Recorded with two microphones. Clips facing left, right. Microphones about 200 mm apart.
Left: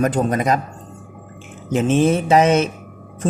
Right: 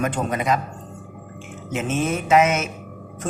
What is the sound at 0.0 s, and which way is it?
Speech, 40° left (ahead or behind).